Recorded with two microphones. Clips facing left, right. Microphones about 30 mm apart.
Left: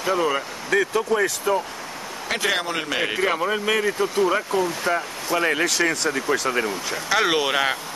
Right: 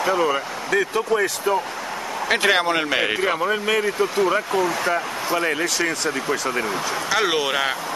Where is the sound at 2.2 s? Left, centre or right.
Right.